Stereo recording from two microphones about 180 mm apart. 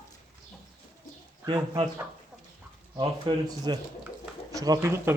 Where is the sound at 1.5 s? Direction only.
25° right (ahead or behind).